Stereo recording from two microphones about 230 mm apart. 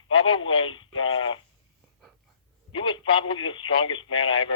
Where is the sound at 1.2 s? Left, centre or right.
Left.